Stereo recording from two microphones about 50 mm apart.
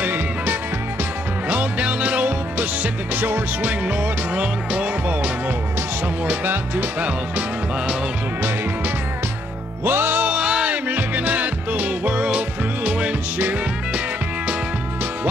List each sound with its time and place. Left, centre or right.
0.0 s music: right
3.8 s music: right
6.2 s speech: right
7.0 s music: right
9.8 s music: right
10.2 s music: right
10.9 s music: right